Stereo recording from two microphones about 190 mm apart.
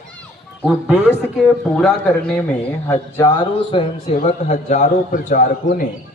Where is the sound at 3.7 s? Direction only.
25° left (ahead or behind).